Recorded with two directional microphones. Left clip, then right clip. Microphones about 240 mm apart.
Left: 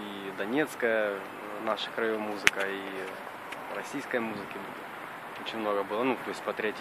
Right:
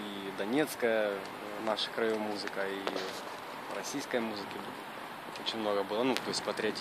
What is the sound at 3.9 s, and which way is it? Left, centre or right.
Speech, centre.